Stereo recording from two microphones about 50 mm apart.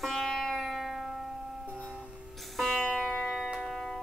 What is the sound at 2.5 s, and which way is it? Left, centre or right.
Music, centre.